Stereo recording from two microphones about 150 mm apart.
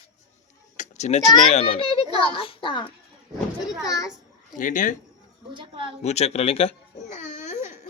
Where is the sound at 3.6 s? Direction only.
Centre (ahead or behind).